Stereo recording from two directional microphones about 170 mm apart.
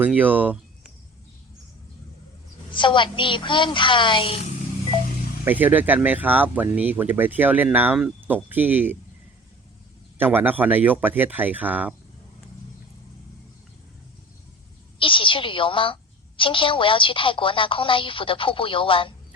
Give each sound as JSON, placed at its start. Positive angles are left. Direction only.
{"t": 0.0, "sound": "speech", "side_deg": -10}
{"t": 2.7, "sound": "a woman's voice", "side_deg": 30}
{"t": 5.5, "sound": "speech", "side_deg": -10}
{"t": 10.2, "sound": "speech", "side_deg": -10}
{"t": 14.9, "sound": "a woman's voice", "side_deg": 30}